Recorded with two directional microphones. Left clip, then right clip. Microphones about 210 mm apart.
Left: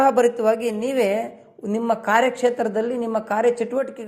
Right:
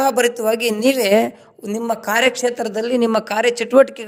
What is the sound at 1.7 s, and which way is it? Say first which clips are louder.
A woman's voice: even; centre (ahead or behind).